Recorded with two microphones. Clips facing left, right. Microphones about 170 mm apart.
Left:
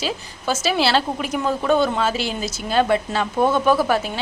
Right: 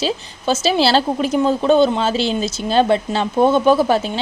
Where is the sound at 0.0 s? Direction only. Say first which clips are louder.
Right 5 dB; 25° right (ahead or behind).